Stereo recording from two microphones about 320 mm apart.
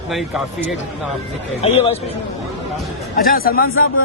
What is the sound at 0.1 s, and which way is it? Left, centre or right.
Speech, centre.